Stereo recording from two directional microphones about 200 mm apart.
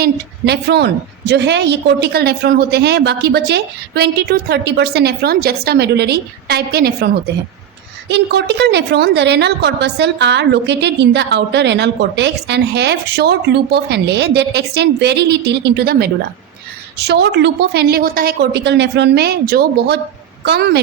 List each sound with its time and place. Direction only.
0.0 s a woman's voice: 55° right (ahead or behind)